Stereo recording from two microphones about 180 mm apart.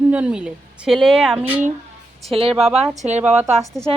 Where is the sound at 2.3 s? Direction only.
30° right (ahead or behind).